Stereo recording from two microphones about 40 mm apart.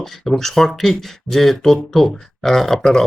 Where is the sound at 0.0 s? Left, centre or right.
Centre.